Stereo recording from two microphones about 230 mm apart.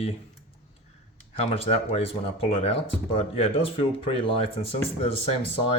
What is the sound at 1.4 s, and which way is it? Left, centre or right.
Speech, left.